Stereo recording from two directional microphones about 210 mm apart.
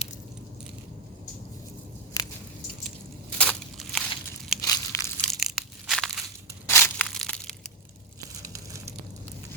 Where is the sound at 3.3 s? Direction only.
5° left (ahead or behind).